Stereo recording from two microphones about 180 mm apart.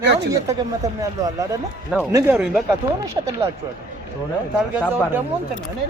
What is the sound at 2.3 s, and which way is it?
Speech, 5° right (ahead or behind).